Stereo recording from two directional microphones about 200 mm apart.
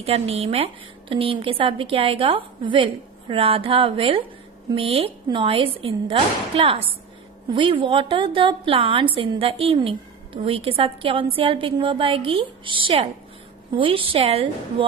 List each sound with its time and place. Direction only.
0.0 s a woman's voice: 30° right (ahead or behind)